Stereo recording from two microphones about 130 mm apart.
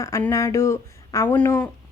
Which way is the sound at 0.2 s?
25° left (ahead or behind).